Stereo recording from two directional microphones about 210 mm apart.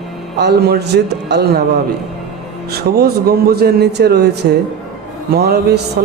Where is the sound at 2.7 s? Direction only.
50° right (ahead or behind).